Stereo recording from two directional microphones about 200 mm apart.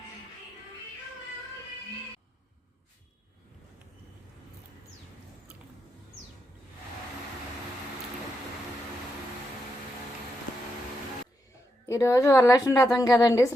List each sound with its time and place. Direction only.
11.9 s a woman's voice: 15° left (ahead or behind)